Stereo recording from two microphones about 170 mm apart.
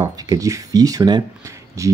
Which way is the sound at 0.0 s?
20° right (ahead or behind).